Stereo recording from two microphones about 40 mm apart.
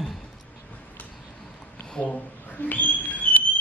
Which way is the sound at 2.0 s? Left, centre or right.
Left.